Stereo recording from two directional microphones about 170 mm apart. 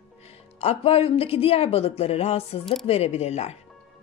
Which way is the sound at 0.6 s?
35° left (ahead or behind).